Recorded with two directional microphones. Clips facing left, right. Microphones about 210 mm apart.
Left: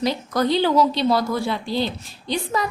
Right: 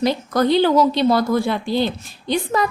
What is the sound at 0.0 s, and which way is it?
A woman's voice, 55° right (ahead or behind).